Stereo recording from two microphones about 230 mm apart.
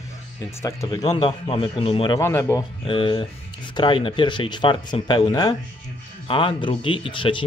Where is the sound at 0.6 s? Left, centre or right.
Centre.